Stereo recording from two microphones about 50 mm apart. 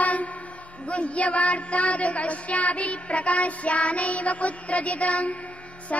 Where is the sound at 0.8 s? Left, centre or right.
Left.